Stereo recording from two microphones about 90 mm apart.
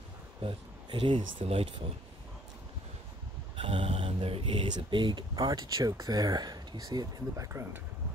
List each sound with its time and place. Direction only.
0.4 s speech: 85° right
3.5 s speech: 90° right; by 7.6 s 35° right (ahead or behind)